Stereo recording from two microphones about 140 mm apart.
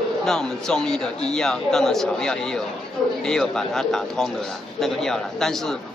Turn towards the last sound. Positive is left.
turn(degrees=5)  # may be behind; listen again after turning